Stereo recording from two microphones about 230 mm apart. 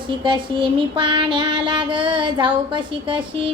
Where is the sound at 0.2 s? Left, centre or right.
Right.